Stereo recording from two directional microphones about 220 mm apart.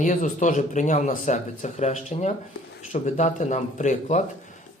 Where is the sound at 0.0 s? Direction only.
35° left (ahead or behind).